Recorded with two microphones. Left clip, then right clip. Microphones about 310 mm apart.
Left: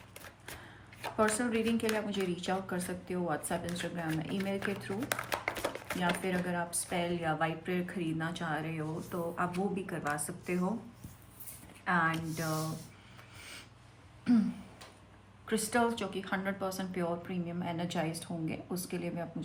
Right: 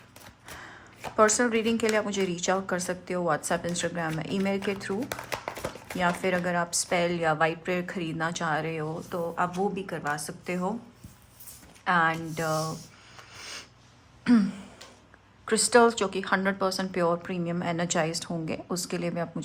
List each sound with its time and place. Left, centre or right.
1.1 s speech: right
6.0 s speech: centre
11.9 s speech: centre
13.3 s a sound: centre
15.4 s speech: centre